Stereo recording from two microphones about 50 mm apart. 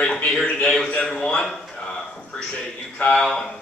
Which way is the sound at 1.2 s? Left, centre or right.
Centre.